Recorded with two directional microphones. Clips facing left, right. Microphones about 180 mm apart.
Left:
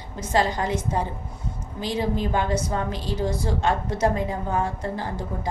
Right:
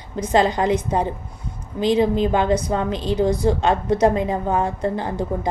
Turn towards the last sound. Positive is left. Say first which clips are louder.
# right 6 dB
turn(degrees=-20)  # may be behind; listen again after turning